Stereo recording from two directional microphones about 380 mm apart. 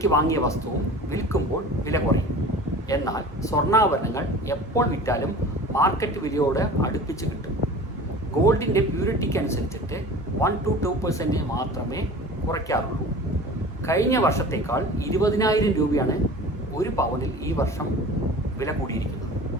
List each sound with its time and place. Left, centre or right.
0.0 s speech: centre
1.9 s speech: centre
8.4 s speech: centre
13.8 s speech: centre